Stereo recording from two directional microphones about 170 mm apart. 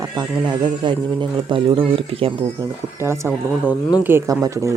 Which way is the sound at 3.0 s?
15° right (ahead or behind).